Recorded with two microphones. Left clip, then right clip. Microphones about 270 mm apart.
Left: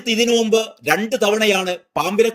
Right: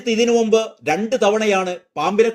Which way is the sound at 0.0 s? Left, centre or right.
Left.